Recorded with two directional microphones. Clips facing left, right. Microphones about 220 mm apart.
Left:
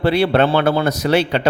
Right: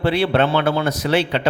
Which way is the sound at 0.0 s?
40° left (ahead or behind).